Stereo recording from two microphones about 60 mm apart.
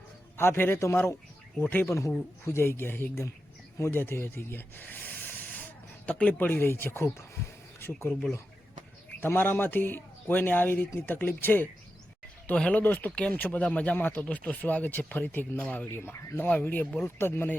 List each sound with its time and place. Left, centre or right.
0.3 s a man's voice: left
1.9 s speech: left
2.4 s a man's voice: left
3.8 s speech: left
6.3 s a man's voice: left
9.2 s a man's voice: left
12.5 s speech: left
15.9 s speech: left
16.6 s a man's voice: left
17.0 s a man's voice: left